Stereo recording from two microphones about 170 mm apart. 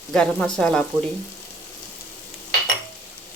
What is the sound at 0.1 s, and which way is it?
Stir, 5° left (ahead or behind).